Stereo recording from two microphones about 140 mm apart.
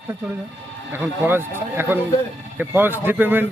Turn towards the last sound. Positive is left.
turn(degrees=-15)  # may be behind; listen again after turning